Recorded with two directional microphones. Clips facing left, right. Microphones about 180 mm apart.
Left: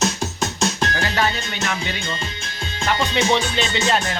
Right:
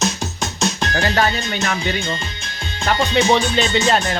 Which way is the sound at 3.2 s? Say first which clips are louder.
Right 5 dB; 45° right (ahead or behind).